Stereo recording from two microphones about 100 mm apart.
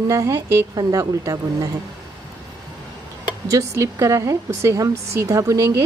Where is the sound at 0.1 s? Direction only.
25° right (ahead or behind).